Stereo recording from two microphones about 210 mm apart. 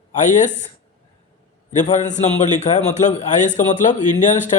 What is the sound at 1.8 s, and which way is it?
Speech, 35° left (ahead or behind).